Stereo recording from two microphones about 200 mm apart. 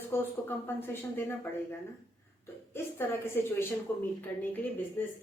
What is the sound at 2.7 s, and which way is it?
A woman's voice, 10° left (ahead or behind).